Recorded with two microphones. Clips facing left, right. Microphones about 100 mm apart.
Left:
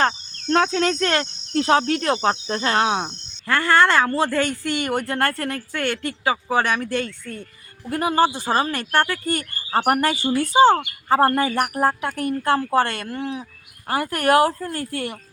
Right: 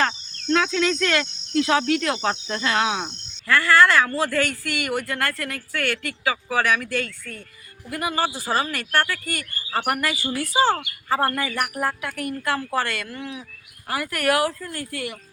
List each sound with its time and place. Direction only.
0.0 s cricket: 40° left (ahead or behind)
7.9 s speech: 35° left (ahead or behind)
11.1 s cricket: 35° left (ahead or behind)